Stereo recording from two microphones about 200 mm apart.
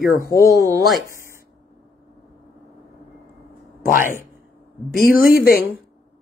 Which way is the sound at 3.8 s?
45° left (ahead or behind).